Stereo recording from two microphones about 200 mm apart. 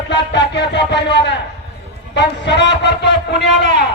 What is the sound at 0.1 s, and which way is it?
Speech, 60° left (ahead or behind).